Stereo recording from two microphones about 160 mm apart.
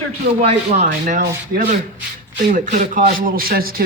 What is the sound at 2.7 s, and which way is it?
Speech, 55° right (ahead or behind).